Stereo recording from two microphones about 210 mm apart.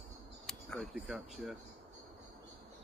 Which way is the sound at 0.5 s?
5° left (ahead or behind).